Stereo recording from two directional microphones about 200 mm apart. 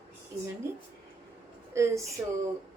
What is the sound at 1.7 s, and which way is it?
Speech, 15° right (ahead or behind).